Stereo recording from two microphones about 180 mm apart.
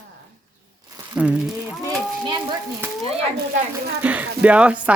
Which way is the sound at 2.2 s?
25° right (ahead or behind).